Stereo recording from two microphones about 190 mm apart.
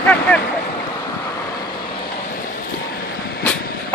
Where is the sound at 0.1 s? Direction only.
5° left (ahead or behind).